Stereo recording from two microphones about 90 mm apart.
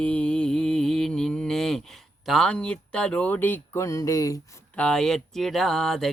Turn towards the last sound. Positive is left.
turn(degrees=5)  # may be behind; listen again after turning